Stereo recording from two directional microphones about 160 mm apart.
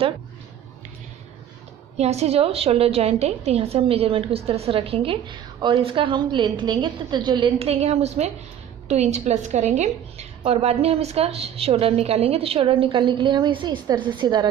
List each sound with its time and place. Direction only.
2.0 s a woman's voice: 40° right (ahead or behind)